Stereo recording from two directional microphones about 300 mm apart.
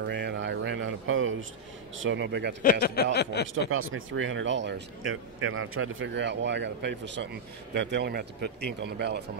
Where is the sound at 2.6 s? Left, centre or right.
Left.